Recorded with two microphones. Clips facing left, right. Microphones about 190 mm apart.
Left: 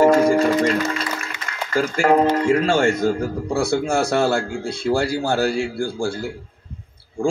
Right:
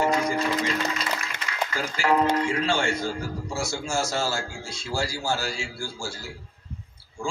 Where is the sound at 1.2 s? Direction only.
50° left (ahead or behind).